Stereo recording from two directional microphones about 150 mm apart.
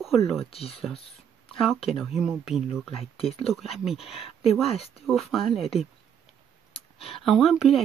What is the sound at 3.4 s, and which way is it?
Speech, centre (ahead or behind).